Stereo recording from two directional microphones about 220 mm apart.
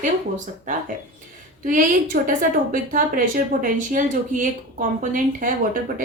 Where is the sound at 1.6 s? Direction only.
35° right (ahead or behind).